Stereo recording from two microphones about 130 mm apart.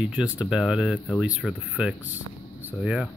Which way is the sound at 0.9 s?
15° left (ahead or behind).